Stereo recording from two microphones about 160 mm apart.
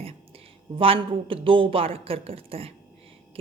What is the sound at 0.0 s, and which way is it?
Speech, 35° right (ahead or behind).